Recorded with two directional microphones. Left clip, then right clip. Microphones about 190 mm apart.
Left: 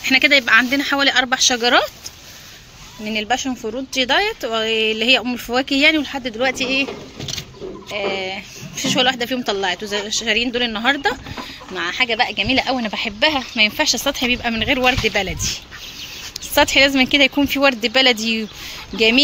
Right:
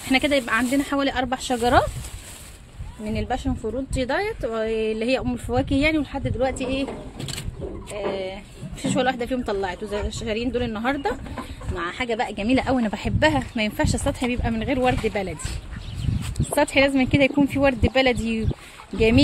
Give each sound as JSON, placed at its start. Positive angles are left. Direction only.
{"t": 0.1, "sound": "speech", "side_deg": -10}
{"t": 3.1, "sound": "speech", "side_deg": 0}
{"t": 7.9, "sound": "speech", "side_deg": 15}
{"t": 8.7, "sound": "speech", "side_deg": 0}
{"t": 12.0, "sound": "a woman's voice", "side_deg": -20}
{"t": 12.4, "sound": "speech", "side_deg": -40}